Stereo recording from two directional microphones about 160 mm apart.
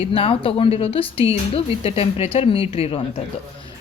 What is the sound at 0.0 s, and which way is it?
A woman's voice, 35° left (ahead or behind).